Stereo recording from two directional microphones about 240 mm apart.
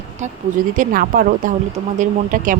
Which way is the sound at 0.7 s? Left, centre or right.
Right.